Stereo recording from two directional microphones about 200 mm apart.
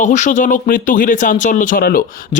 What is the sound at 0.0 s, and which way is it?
Speech, 40° left (ahead or behind).